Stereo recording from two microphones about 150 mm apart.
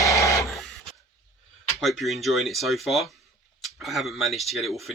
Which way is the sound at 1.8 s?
Centre (ahead or behind).